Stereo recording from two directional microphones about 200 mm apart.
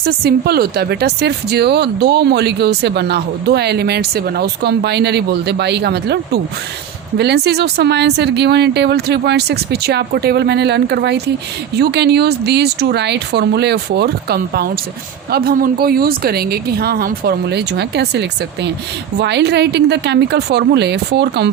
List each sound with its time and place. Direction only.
0.0 s a woman's voice: 50° right (ahead or behind)